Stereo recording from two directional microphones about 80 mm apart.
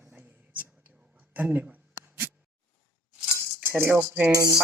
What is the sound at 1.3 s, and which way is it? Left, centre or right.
Speech, right.